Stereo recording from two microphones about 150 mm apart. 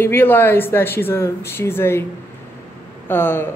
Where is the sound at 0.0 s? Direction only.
15° left (ahead or behind).